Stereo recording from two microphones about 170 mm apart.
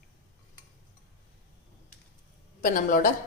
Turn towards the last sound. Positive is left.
turn(degrees=55)  # may be behind; listen again after turning